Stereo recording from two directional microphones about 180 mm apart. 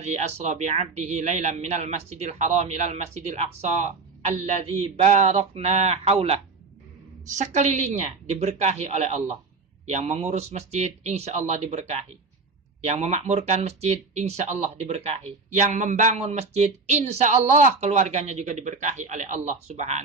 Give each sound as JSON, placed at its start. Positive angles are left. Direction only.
{"t": 0.0, "sound": "speech", "side_deg": -40}